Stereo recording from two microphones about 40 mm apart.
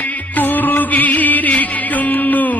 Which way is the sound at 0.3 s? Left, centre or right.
Left.